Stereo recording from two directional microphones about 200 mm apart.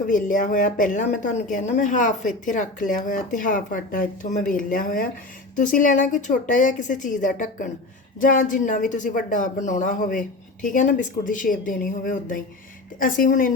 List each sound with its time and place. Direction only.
0.1 s a woman's voice: 40° left (ahead or behind)